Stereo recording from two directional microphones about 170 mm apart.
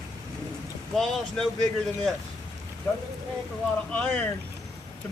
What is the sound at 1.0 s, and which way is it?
Speech, 5° left (ahead or behind).